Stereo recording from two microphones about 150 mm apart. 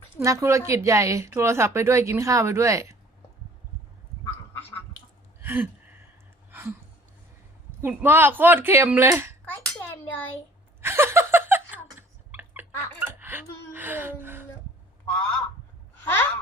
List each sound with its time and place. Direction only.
0.2 s a woman's voice: 20° right (ahead or behind)
5.4 s gasp: 10° right (ahead or behind)
6.5 s a sound: 15° right (ahead or behind)
7.8 s speech: 15° right (ahead or behind)
9.5 s a sound: 10° left (ahead or behind)
10.8 s laughter: 15° right (ahead or behind)
15.1 s honk: 5° left (ahead or behind)